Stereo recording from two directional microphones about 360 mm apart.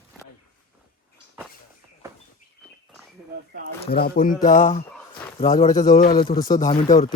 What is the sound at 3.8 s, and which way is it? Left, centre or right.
Speech, left.